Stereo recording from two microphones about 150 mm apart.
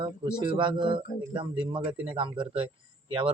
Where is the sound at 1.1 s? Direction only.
75° left (ahead or behind).